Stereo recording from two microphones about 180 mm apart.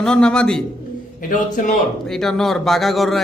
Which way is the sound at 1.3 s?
45° left (ahead or behind).